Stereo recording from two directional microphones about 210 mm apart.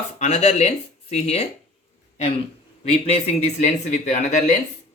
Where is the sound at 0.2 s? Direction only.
30° left (ahead or behind).